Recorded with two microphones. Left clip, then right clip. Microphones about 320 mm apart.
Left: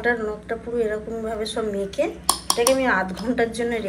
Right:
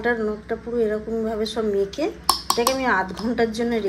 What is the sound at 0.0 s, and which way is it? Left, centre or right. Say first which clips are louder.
Speech: even; centre.